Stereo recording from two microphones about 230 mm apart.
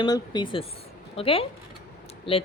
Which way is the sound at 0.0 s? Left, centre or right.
Centre.